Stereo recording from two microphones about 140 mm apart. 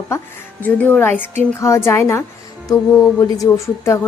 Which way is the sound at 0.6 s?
10° left (ahead or behind).